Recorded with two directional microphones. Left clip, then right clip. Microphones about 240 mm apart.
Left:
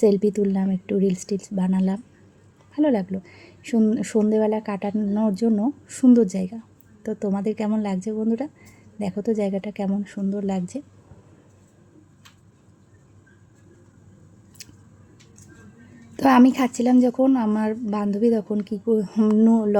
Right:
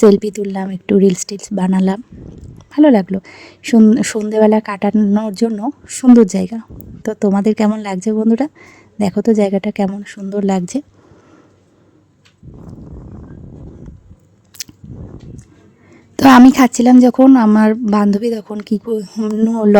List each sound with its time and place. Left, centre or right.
0.0 s speech: right
14.6 s biting: right
16.1 s speech: right